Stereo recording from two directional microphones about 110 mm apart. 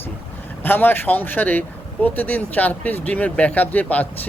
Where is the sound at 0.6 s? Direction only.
20° left (ahead or behind).